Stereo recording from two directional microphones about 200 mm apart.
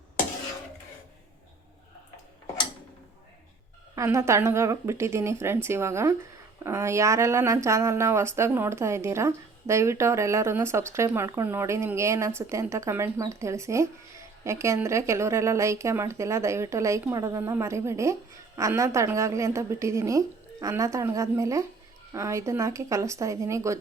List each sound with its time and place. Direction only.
3.9 s speech: 15° right (ahead or behind)